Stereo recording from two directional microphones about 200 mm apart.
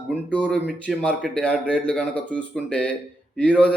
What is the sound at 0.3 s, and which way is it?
A man's voice, 5° left (ahead or behind).